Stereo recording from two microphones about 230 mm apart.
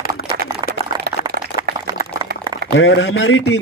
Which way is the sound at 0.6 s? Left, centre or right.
Centre.